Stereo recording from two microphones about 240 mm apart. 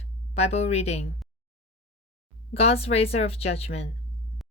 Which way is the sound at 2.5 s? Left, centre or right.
Left.